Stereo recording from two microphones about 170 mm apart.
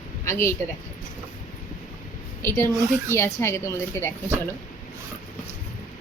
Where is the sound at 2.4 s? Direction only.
15° left (ahead or behind).